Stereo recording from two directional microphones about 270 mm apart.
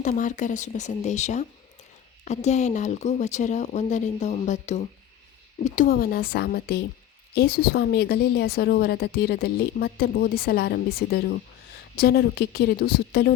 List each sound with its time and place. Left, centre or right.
0.0 s a woman's voice: left